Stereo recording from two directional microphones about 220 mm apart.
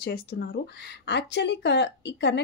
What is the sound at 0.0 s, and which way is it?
A woman's voice, 45° left (ahead or behind).